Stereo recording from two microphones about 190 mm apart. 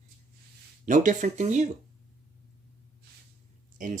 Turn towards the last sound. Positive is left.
turn(degrees=-45)  # may be behind; listen again after turning